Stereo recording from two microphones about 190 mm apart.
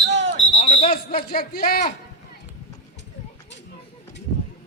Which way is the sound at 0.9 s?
50° left (ahead or behind).